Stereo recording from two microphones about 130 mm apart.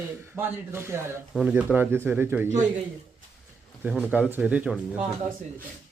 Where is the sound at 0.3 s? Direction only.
20° right (ahead or behind).